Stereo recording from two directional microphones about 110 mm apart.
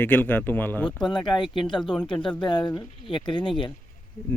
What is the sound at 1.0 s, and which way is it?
Speech, 45° left (ahead or behind).